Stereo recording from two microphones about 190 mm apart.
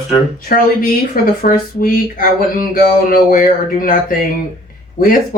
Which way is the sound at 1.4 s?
45° left (ahead or behind).